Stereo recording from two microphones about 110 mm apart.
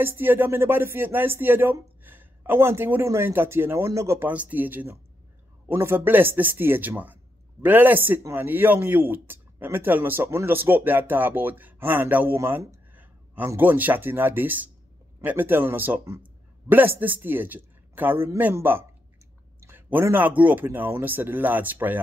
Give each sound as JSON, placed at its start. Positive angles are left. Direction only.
{"t": 0.0, "sound": "speech", "side_deg": -20}
{"t": 4.3, "sound": "speech", "side_deg": -15}
{"t": 12.4, "sound": "a sound", "side_deg": -20}
{"t": 13.5, "sound": "speech", "side_deg": -15}